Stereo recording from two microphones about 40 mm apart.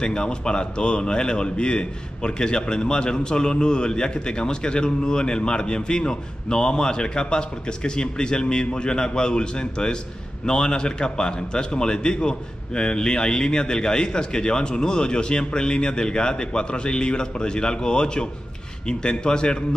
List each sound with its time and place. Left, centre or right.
0.0 s a man's voice: left